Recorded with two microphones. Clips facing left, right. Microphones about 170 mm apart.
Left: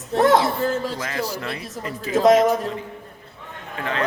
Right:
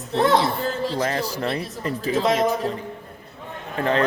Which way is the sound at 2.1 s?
45° left (ahead or behind).